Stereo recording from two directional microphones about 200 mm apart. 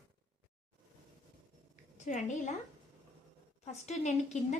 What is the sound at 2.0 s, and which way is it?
Speech, 35° left (ahead or behind).